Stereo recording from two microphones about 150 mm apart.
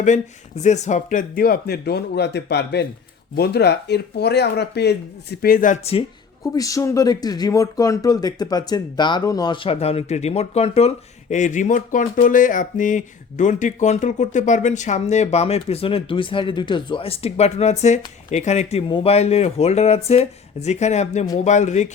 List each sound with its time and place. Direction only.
0.0 s speech: 50° left (ahead or behind); by 2.2 s 90° left
3.3 s speech: 90° left; by 5.8 s 65° left (ahead or behind)
6.4 s speech: 25° left (ahead or behind)
9.6 s speech: 45° left (ahead or behind)